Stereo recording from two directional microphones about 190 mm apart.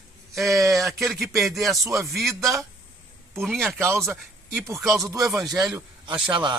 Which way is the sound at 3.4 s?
Centre (ahead or behind).